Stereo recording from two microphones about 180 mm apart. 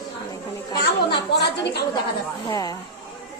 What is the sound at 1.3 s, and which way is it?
Speech, 65° left (ahead or behind).